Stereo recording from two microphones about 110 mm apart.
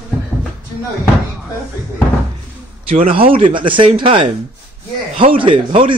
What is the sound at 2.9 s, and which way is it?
A man's voice, 55° right (ahead or behind).